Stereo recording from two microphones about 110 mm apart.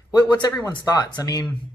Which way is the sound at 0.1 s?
35° left (ahead or behind).